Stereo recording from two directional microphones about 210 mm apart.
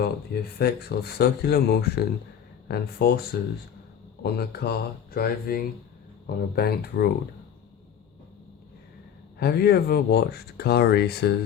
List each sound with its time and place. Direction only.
0.6 s speech: 50° left (ahead or behind)
9.4 s speech: 45° left (ahead or behind)